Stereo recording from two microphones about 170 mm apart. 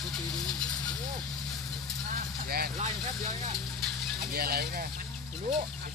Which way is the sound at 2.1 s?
60° right (ahead or behind).